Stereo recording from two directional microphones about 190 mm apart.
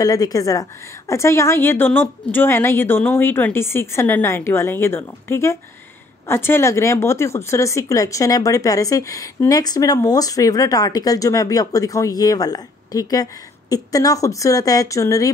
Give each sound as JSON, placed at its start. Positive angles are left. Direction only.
{"t": 0.0, "sound": "speech", "side_deg": 20}